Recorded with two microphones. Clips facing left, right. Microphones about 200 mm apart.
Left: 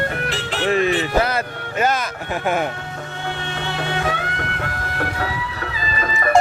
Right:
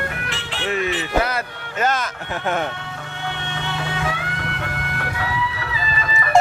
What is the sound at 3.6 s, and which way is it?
Music, 35° left (ahead or behind).